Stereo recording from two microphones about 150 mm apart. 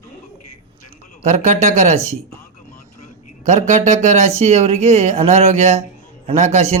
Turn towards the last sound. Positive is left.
turn(degrees=-45)  # may be behind; listen again after turning